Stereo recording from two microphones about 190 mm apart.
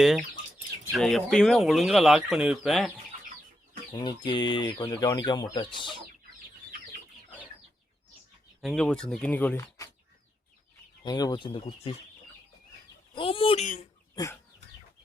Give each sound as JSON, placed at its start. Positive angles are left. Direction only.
{"t": 0.9, "sound": "speech", "side_deg": 0}
{"t": 3.9, "sound": "speech", "side_deg": 25}
{"t": 8.6, "sound": "speech", "side_deg": 5}
{"t": 11.0, "sound": "speech", "side_deg": 20}
{"t": 13.1, "sound": "speech", "side_deg": 30}